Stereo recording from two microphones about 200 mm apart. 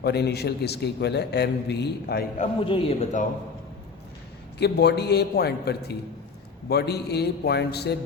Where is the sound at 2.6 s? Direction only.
25° left (ahead or behind).